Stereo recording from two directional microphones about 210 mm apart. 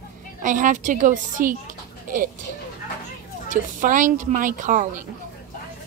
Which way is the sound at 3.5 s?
40° right (ahead or behind).